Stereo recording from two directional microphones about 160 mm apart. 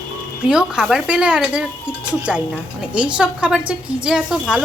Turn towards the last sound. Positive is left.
turn(degrees=-5)  # may be behind; listen again after turning